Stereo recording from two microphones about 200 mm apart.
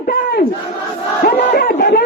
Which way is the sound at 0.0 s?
45° left (ahead or behind).